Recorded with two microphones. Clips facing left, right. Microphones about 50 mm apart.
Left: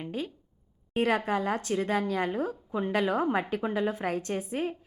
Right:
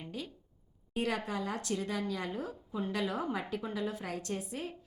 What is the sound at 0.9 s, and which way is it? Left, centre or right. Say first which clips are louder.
A woman's voice: left 8 dB; left.